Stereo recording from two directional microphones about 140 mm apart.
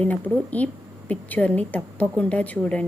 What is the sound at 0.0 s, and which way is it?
A woman's voice, 10° left (ahead or behind).